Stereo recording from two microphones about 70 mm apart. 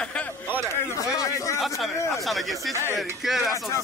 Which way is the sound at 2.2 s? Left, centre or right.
Centre.